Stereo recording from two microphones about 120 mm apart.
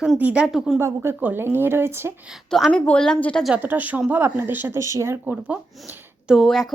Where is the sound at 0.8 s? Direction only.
20° right (ahead or behind).